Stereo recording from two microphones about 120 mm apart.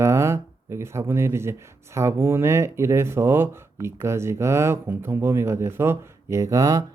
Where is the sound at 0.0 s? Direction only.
25° right (ahead or behind).